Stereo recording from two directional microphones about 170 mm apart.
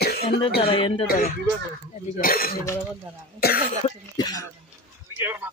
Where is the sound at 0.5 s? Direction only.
30° left (ahead or behind).